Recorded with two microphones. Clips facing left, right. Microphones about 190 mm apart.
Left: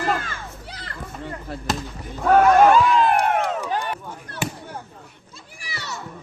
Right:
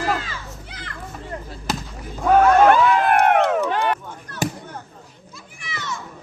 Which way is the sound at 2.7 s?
65° right (ahead or behind).